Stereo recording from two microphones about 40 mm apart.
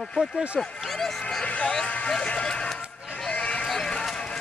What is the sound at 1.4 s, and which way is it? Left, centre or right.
Music, left.